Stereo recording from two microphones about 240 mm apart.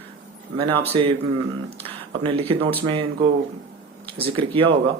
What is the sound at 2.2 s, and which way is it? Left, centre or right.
Speech, right.